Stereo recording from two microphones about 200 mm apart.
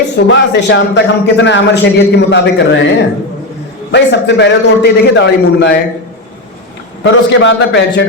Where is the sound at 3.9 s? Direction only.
60° left (ahead or behind).